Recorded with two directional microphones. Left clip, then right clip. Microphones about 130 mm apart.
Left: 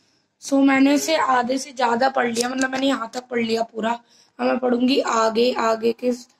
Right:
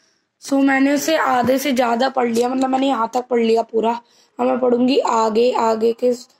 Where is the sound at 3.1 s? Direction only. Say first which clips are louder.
Right 7 dB; 30° left (ahead or behind).